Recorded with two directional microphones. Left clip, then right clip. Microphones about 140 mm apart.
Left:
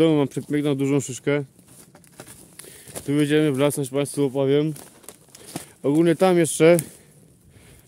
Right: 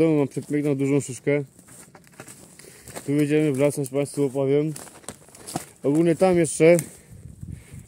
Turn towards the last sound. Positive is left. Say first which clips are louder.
# left 1 dB
turn(degrees=15)  # may be behind; listen again after turning